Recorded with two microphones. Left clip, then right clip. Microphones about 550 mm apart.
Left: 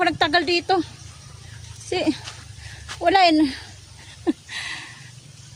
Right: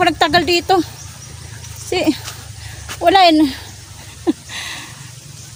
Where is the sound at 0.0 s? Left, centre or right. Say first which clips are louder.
Right 6 dB; left.